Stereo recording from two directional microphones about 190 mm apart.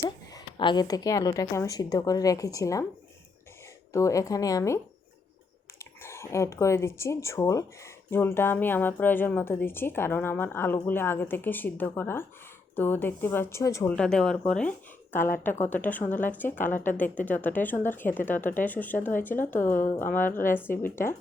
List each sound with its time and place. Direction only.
0.3 s a woman's voice: 20° left (ahead or behind)
3.9 s speech: 15° left (ahead or behind)
5.8 s speech: 15° left (ahead or behind)
13.9 s speech: 5° left (ahead or behind)
19.8 s speech: 45° left (ahead or behind)
20.1 s speech: 10° left (ahead or behind)